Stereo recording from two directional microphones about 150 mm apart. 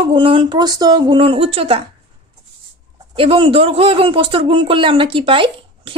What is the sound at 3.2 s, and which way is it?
Speech, 35° right (ahead or behind).